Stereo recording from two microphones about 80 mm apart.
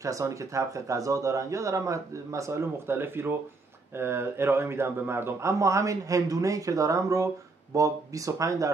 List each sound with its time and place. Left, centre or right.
0.0 s speech: right